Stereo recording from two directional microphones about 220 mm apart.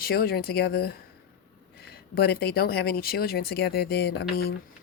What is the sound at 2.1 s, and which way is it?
Speech, 45° left (ahead or behind).